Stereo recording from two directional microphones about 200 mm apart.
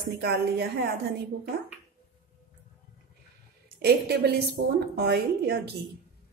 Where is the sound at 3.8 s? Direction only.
55° right (ahead or behind).